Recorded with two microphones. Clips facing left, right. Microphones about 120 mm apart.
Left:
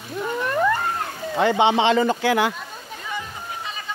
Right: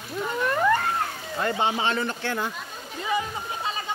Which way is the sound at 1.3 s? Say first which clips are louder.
Left 8 dB; 80° left.